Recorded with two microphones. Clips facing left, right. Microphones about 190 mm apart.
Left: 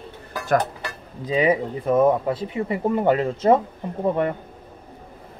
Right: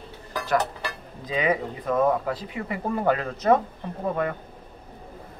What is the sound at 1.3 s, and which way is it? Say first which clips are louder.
Speech: left 5 dB; 30° left (ahead or behind).